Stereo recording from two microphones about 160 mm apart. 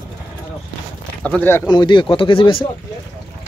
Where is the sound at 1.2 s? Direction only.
10° left (ahead or behind).